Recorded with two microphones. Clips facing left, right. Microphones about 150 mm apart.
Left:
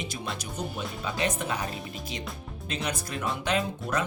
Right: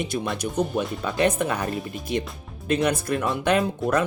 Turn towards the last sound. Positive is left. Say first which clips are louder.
# right 7 dB
turn(degrees=-55)  # may be behind; listen again after turning